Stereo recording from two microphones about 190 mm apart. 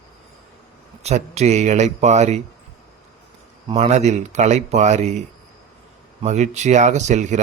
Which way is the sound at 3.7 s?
35° right (ahead or behind).